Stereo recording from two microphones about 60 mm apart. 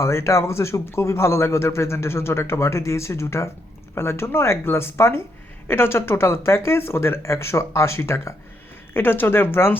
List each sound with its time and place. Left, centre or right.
0.0 s speech: left
8.9 s speech: left